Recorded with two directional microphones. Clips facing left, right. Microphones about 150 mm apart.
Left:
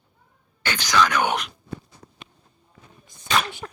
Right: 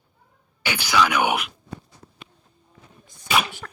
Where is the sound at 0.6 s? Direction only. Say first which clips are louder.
Even; 10° right (ahead or behind).